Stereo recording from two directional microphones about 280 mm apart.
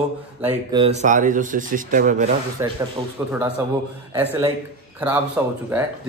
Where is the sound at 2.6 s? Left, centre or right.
Centre.